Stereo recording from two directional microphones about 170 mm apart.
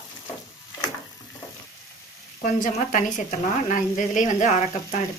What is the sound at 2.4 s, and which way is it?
Speech, 50° left (ahead or behind).